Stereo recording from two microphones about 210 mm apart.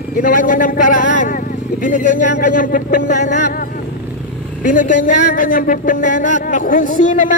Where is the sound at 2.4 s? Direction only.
40° left (ahead or behind).